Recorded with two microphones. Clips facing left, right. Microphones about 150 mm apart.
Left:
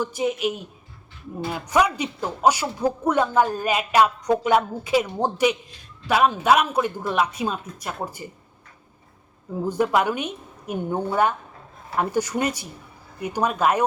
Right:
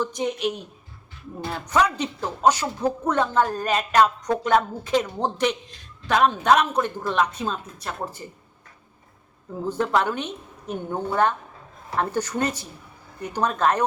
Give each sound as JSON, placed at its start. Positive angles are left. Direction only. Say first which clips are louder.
{"t": 0.0, "sound": "a woman's voice", "louder": "left 1 dB", "side_deg": 5}
{"t": 9.6, "sound": "speech", "louder": "left 2 dB", "side_deg": 10}